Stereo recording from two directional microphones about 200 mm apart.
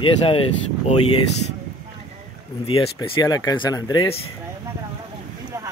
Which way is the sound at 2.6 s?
25° left (ahead or behind).